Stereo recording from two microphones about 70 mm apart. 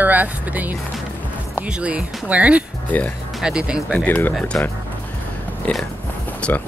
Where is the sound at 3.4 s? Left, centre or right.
Centre.